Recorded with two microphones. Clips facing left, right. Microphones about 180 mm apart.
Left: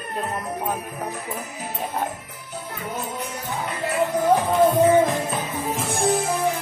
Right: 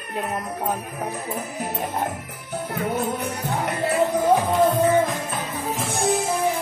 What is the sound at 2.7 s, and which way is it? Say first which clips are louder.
Music: right 6 dB; 60° right (ahead or behind).